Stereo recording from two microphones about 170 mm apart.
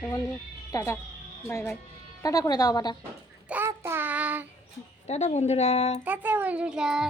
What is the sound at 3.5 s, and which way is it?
Child singing, 15° right (ahead or behind).